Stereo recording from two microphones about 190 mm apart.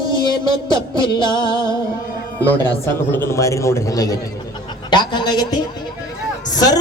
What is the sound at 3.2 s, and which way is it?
Speech, 15° left (ahead or behind).